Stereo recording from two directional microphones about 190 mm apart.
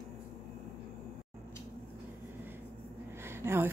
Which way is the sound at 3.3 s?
15° right (ahead or behind).